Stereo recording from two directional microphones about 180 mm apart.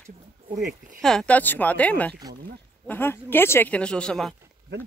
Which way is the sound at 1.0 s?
5° left (ahead or behind).